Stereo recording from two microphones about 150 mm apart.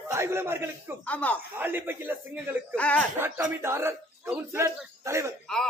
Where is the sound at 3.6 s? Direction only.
15° right (ahead or behind).